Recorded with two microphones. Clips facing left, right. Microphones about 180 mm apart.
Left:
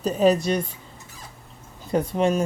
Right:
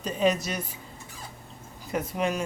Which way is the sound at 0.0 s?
35° left (ahead or behind).